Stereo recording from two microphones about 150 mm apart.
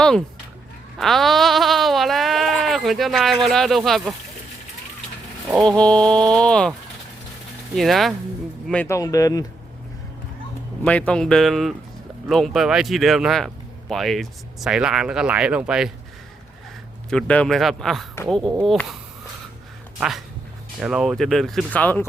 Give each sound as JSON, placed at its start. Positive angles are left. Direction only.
{"t": 0.9, "sound": "sheep", "side_deg": 0}
{"t": 3.4, "sound": "speech", "side_deg": 0}
{"t": 5.6, "sound": "speech", "side_deg": 5}
{"t": 7.8, "sound": "speech", "side_deg": 0}
{"t": 8.7, "sound": "speech", "side_deg": 10}
{"t": 9.0, "sound": "speech", "side_deg": 25}
{"t": 10.8, "sound": "speech", "side_deg": 10}
{"t": 17.1, "sound": "speech", "side_deg": 5}
{"t": 20.0, "sound": "speech", "side_deg": 0}